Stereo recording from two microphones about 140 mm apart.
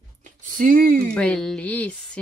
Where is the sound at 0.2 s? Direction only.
70° right (ahead or behind); by 1.0 s 85° right.